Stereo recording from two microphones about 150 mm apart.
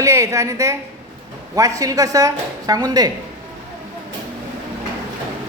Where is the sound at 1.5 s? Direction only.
25° right (ahead or behind).